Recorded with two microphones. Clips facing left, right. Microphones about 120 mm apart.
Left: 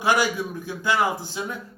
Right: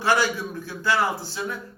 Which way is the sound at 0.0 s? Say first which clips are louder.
Left 1 dB; 15° left (ahead or behind).